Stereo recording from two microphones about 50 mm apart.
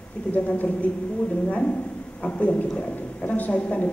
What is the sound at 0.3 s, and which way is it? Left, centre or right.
A woman's voice, left.